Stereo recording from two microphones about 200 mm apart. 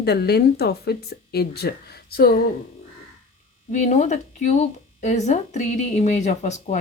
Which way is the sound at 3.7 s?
40° left (ahead or behind).